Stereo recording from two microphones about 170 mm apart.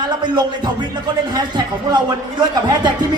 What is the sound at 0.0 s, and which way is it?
Speech, 25° right (ahead or behind).